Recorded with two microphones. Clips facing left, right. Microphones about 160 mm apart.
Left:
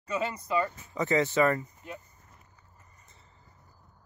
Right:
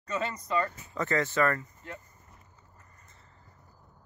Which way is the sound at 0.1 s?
15° left (ahead or behind).